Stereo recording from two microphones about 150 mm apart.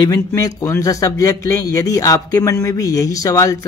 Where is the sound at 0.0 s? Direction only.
20° left (ahead or behind).